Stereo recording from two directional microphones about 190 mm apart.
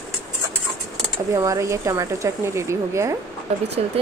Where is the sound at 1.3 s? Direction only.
15° right (ahead or behind).